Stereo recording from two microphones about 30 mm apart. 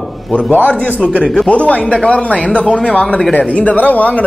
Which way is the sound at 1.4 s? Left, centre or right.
Left.